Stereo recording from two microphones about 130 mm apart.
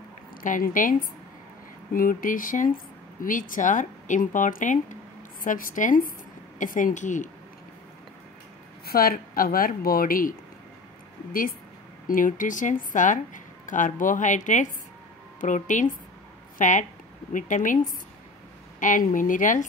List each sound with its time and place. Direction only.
0.4 s a woman's voice: 90° left; by 7.2 s 70° left (ahead or behind)
9.0 s speech: 90° left
12.1 s a woman's voice: 90° left; by 16.8 s 75° left (ahead or behind)
17.3 s speech: 85° left
18.8 s speech: 85° left